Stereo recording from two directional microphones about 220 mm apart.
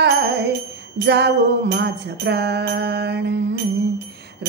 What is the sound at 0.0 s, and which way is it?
Music, 50° right (ahead or behind).